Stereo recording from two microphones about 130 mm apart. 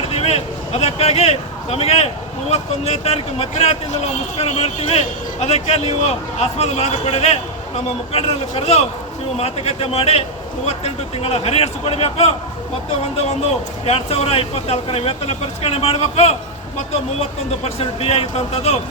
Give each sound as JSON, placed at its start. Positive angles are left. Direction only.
{"t": 0.1, "sound": "a man's voice", "side_deg": 50}
{"t": 13.8, "sound": "a man's voice", "side_deg": 50}